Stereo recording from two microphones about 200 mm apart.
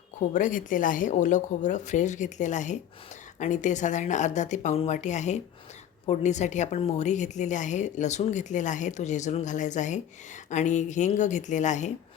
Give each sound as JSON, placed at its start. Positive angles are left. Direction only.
{"t": 0.3, "sound": "a woman's voice", "side_deg": 40}